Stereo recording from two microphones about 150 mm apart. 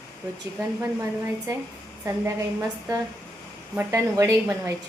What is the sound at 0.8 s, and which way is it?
A woman's voice, 20° right (ahead or behind).